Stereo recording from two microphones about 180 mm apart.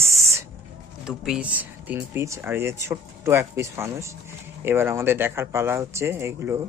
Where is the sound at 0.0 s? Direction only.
15° right (ahead or behind).